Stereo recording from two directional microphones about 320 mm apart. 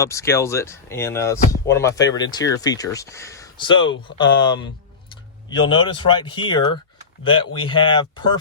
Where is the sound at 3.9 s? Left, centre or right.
Left.